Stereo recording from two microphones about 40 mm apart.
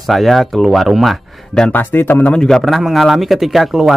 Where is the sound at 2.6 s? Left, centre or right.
Centre.